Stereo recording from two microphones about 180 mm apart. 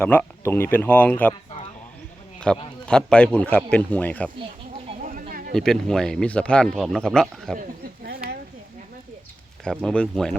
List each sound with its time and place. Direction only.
0.0 s a man's voice: 10° left (ahead or behind)
2.5 s a man's voice: 5° left (ahead or behind)
5.3 s a sound: 50° right (ahead or behind)
5.5 s speech: 5° left (ahead or behind)
9.6 s speech: 5° left (ahead or behind)